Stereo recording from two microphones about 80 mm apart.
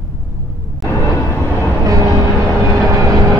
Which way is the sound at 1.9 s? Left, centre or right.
Right.